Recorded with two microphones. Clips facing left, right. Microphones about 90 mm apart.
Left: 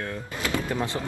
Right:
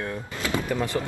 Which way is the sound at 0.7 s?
20° left (ahead or behind).